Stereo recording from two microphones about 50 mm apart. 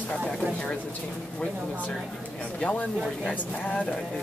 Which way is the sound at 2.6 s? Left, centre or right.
Left.